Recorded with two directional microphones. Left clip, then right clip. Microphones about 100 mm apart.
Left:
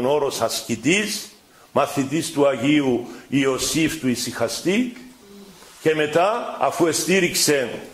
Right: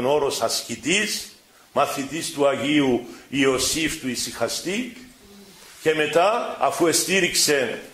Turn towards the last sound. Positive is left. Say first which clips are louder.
# left 1 dB
turn(degrees=20)  # may be behind; listen again after turning